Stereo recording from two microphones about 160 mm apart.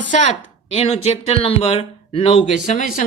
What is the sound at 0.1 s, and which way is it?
Speech, 50° left (ahead or behind).